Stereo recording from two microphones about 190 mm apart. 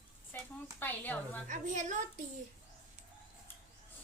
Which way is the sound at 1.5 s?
40° right (ahead or behind).